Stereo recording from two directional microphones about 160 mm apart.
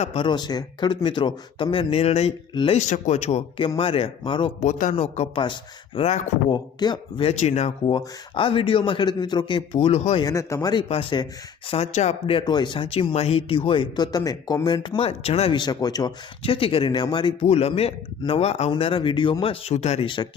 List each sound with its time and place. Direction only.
0.0 s speech: 40° left (ahead or behind)
0.3 s speech: 25° left (ahead or behind)
4.6 s speech: 45° left (ahead or behind)
6.5 s speech: 25° left (ahead or behind); by 7.7 s 40° left (ahead or behind)
7.9 s speech: 30° left (ahead or behind)
10.2 s speech: 20° left (ahead or behind)
10.8 s speech: 35° left (ahead or behind)